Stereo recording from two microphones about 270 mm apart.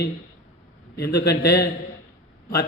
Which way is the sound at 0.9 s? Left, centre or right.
Left.